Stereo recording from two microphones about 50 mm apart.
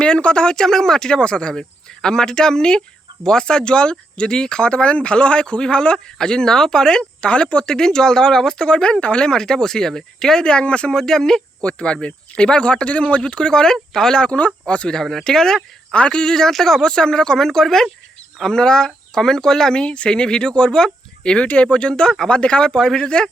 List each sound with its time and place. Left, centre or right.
0.0 s speech: centre
11.6 s speech: left
15.2 s speech: centre
15.9 s speech: left